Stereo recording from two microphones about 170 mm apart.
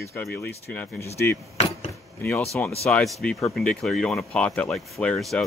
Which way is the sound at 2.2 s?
10° left (ahead or behind).